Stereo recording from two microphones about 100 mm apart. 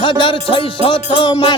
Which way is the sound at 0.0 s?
55° left (ahead or behind).